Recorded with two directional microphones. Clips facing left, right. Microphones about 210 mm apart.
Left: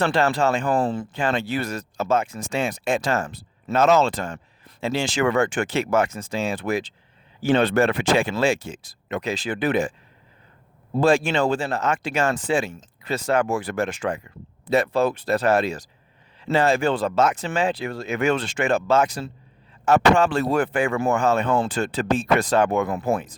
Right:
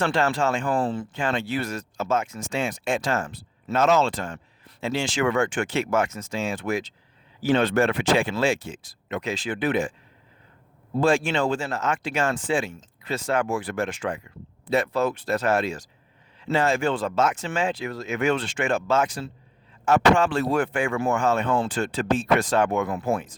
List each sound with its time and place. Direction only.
0.0 s speech: 35° left (ahead or behind)
11.0 s speech: 40° left (ahead or behind)